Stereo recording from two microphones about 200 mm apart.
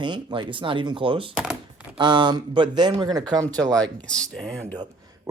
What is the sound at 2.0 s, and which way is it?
Speech, 20° right (ahead or behind).